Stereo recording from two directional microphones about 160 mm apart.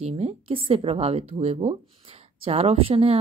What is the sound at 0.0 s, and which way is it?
Speech, 40° right (ahead or behind).